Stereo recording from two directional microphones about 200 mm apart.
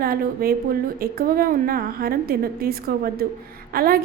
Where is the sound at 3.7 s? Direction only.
45° right (ahead or behind).